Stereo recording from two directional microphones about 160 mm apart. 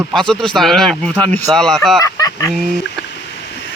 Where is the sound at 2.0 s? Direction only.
20° left (ahead or behind).